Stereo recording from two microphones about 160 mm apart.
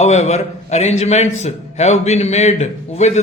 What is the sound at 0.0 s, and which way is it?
A man's voice, 45° left (ahead or behind).